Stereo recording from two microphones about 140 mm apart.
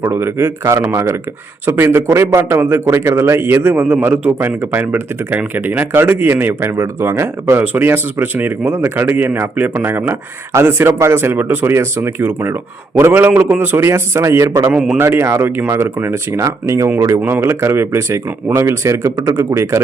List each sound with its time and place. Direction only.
0.0 s a man's voice: 15° right (ahead or behind)
14.7 s a man's voice: 5° right (ahead or behind)
14.9 s a man's voice: 15° right (ahead or behind)